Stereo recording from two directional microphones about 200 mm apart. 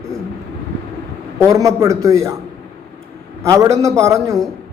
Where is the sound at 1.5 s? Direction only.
15° right (ahead or behind).